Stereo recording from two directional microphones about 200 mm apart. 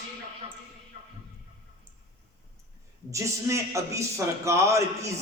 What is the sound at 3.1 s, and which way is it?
A man's voice, 15° right (ahead or behind).